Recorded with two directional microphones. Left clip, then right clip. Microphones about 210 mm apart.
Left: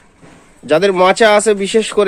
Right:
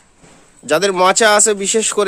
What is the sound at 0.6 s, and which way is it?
Speech, 15° right (ahead or behind).